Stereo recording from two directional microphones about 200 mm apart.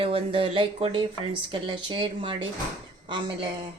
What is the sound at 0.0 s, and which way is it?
Speech, 30° right (ahead or behind).